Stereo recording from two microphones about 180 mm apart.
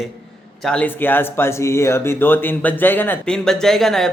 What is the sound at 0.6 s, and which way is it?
Speech, 5° left (ahead or behind).